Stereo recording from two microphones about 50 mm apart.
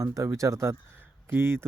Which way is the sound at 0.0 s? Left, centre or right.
Right.